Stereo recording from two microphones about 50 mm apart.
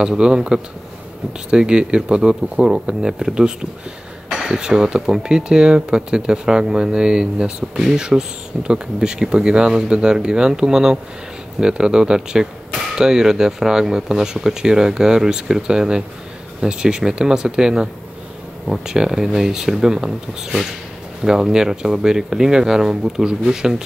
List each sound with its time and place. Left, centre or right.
0.0 s speech: centre
21.2 s speech: centre